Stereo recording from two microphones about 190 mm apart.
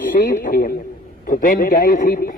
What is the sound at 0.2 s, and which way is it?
A man's voice, 45° left (ahead or behind).